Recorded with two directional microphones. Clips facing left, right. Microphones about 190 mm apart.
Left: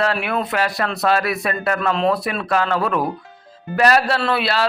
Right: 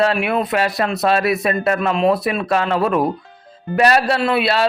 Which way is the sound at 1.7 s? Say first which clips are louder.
Right 2 dB; 10° right (ahead or behind).